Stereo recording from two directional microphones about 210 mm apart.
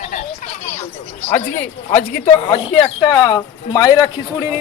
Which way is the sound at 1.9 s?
35° left (ahead or behind).